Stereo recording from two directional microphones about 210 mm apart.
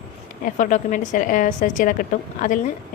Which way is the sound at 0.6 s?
40° left (ahead or behind).